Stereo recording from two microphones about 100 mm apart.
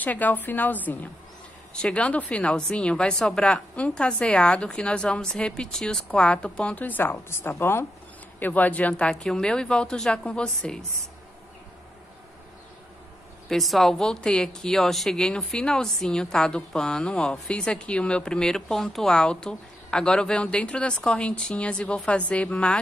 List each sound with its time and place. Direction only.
0.0 s a woman's voice: 15° left (ahead or behind)
13.5 s a woman's voice: centre (ahead or behind)